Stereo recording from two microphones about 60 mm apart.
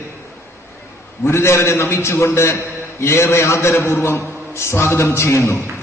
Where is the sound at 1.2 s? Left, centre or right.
Left.